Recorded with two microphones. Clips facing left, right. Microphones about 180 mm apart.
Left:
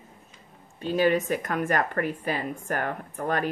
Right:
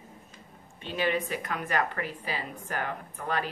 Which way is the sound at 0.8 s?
40° left (ahead or behind).